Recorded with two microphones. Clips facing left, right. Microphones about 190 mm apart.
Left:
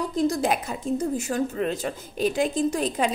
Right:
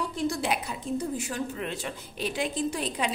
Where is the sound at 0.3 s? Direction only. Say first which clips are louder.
Left 5 dB; 45° left (ahead or behind).